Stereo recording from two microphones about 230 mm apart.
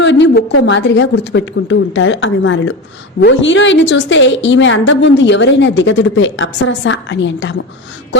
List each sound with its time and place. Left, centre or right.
0.0 s a woman's voice: left